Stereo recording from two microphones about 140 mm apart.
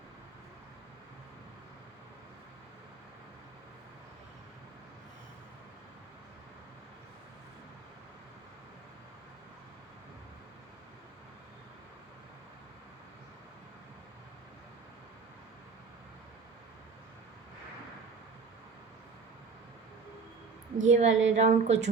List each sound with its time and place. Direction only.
20.8 s a woman's voice: 55° right (ahead or behind)